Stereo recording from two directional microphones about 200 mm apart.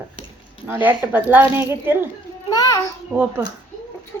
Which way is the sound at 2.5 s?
20° left (ahead or behind).